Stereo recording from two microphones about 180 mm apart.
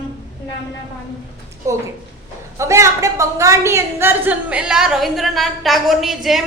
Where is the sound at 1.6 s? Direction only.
15° right (ahead or behind).